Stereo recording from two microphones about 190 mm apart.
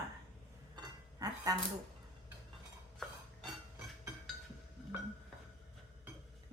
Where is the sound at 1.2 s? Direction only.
20° right (ahead or behind).